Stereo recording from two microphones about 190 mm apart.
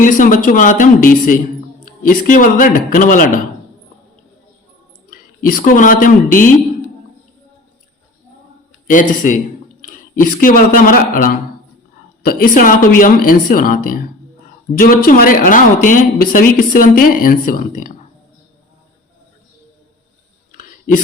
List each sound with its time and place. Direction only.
0.0 s speech: 45° left (ahead or behind)
5.1 s a man's voice: 50° left (ahead or behind)
8.9 s speech: 45° left (ahead or behind)
20.5 s clicking: 45° left (ahead or behind)